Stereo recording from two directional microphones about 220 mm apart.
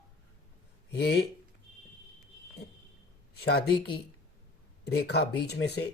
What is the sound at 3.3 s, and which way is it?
Speech, 45° left (ahead or behind).